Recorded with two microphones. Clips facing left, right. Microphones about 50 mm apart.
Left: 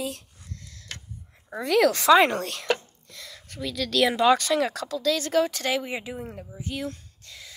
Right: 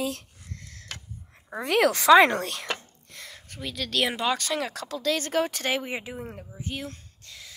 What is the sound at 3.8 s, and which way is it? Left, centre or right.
Speech, centre.